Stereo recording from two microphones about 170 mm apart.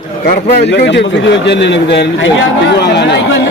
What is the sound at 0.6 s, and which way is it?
A man's voice, 85° left.